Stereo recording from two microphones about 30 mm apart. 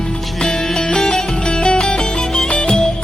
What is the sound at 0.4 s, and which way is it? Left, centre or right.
Music, left.